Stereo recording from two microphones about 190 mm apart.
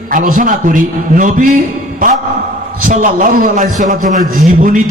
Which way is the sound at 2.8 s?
45° right (ahead or behind).